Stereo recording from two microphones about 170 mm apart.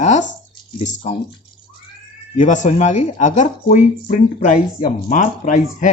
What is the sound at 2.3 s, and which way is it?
Speech, 45° left (ahead or behind).